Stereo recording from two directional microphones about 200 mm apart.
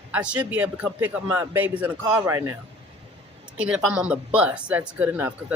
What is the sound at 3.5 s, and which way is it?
Speech, 5° right (ahead or behind).